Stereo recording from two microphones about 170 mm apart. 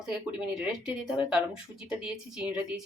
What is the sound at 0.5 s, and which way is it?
Speech, 5° right (ahead or behind).